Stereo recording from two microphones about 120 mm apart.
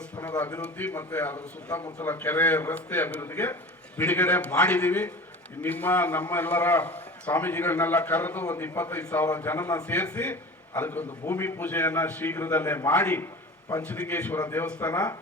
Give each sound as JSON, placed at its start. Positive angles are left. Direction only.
{"t": 0.3, "sound": "a man's voice", "side_deg": 15}
{"t": 9.8, "sound": "a man's voice", "side_deg": 15}